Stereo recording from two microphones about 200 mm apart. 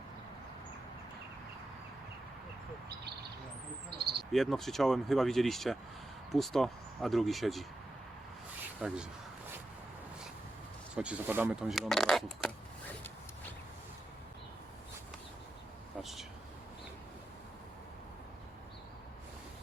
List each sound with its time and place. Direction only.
3.8 s owl: 55° right (ahead or behind)
4.3 s speech: centre (ahead or behind)
8.8 s speech: 5° right (ahead or behind)
10.9 s speech: 5° right (ahead or behind)
16.0 s speech: centre (ahead or behind)